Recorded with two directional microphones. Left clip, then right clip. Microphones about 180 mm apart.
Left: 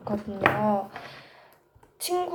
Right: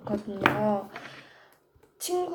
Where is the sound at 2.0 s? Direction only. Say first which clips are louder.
Left 2 dB; 10° left (ahead or behind).